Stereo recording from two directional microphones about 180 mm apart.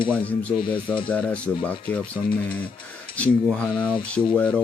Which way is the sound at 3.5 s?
5° left (ahead or behind).